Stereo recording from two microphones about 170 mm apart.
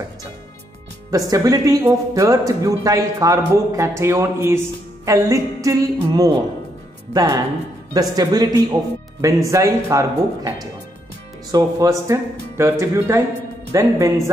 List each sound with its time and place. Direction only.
1.1 s a man's voice: 20° right (ahead or behind)